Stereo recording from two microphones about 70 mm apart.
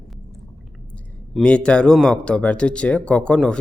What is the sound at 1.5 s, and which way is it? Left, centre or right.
Speech, centre.